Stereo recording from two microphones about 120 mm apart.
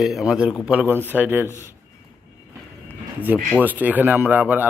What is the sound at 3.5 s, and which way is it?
A man's voice, 15° right (ahead or behind).